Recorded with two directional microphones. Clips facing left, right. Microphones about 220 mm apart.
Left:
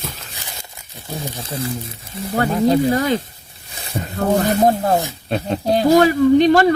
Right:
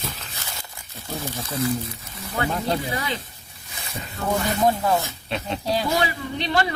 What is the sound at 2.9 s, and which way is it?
Speech, 45° left (ahead or behind).